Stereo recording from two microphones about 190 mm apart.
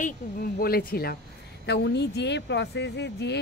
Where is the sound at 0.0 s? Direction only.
50° left (ahead or behind).